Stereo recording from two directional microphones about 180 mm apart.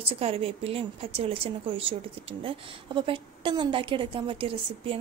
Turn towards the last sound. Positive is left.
turn(degrees=-30)  # may be behind; listen again after turning